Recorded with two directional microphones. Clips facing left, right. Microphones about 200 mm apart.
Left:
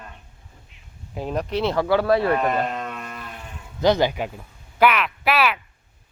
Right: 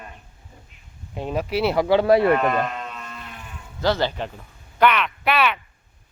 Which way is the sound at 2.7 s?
45° left (ahead or behind).